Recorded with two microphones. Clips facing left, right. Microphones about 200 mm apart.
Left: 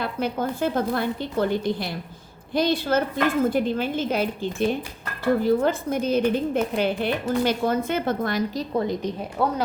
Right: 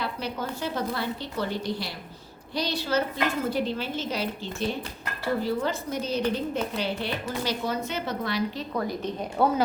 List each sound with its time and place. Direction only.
0.0 s a woman's voice: 50° left (ahead or behind)
8.7 s a woman's voice: 25° left (ahead or behind)
9.4 s speech: centre (ahead or behind)